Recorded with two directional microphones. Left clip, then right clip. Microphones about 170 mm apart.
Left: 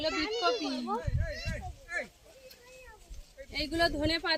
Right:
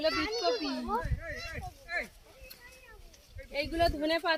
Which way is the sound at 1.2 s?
25° left (ahead or behind).